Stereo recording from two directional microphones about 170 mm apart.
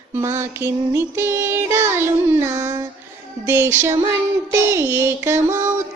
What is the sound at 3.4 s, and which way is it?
Music, 15° right (ahead or behind).